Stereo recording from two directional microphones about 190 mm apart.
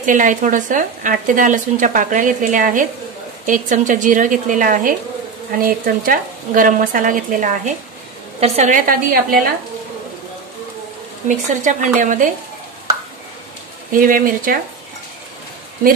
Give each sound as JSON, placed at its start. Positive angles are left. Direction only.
{"t": 0.0, "sound": "speech", "side_deg": -45}
{"t": 8.4, "sound": "speech", "side_deg": -35}
{"t": 11.2, "sound": "speech", "side_deg": -40}
{"t": 13.9, "sound": "speech", "side_deg": -45}